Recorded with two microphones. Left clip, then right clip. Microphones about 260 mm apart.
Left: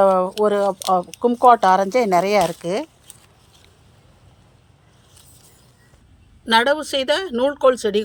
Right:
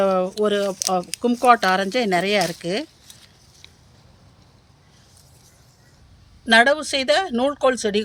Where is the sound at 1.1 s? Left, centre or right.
Right.